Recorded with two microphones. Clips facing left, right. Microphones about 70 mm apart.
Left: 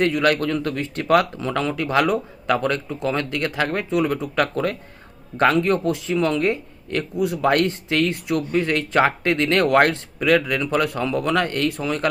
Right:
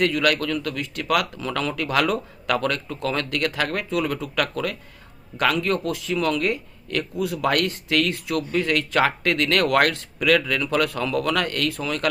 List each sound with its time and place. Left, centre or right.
0.0 s speech: left